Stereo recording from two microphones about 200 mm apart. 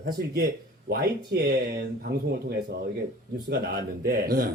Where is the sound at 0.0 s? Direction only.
55° right (ahead or behind).